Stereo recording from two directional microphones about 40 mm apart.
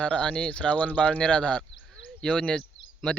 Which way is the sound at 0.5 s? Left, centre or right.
Left.